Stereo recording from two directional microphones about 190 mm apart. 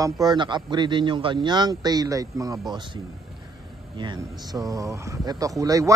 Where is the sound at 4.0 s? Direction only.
20° right (ahead or behind).